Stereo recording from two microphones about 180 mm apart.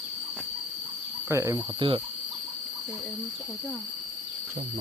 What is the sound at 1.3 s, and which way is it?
Speech, 15° right (ahead or behind).